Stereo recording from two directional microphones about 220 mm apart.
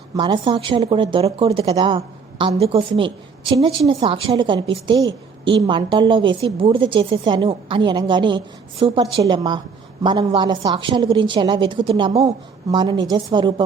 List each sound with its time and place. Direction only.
0.2 s a woman's voice: 20° right (ahead or behind)